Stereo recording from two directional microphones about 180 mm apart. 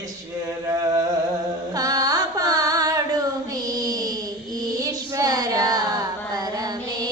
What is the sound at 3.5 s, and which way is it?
Child singing, 20° right (ahead or behind).